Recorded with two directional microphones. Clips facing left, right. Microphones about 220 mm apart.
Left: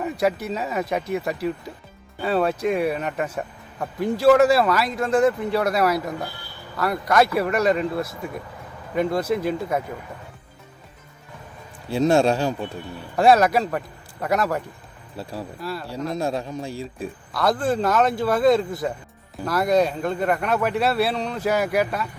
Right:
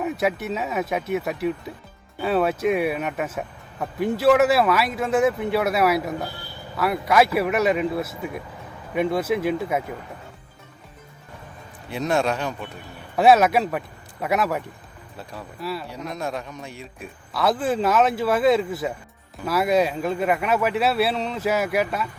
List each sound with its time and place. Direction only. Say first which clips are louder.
0.0 s speech: left 1 dB; centre (ahead or behind)
11.9 s a man's voice: left 5 dB; 30° left (ahead or behind)
13.1 s speech: even; 5° right (ahead or behind)
15.2 s speech: left 5 dB; 30° left (ahead or behind)
15.6 s speech: right 3 dB; centre (ahead or behind)
16.0 s a man's voice: left 5 dB; 30° left (ahead or behind)
17.3 s speech: even; 5° right (ahead or behind)